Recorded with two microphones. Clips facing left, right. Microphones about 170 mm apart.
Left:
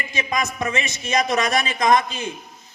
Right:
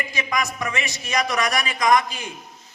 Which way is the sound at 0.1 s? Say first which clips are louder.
Left 4 dB; 25° left (ahead or behind).